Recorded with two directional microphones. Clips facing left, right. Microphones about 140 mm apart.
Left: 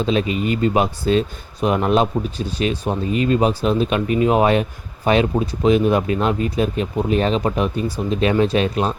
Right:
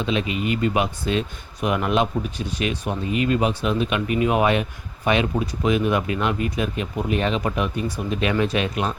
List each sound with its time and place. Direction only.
0.0 s speech: 35° left (ahead or behind)